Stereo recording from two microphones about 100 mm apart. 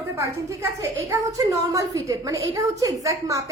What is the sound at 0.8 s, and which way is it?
A woman's voice, 30° right (ahead or behind).